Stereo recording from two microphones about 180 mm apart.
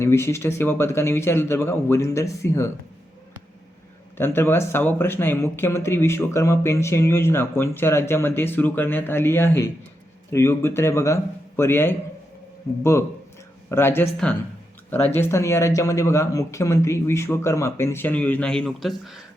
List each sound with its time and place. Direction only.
0.0 s speech: 15° left (ahead or behind)
4.2 s speech: 10° left (ahead or behind)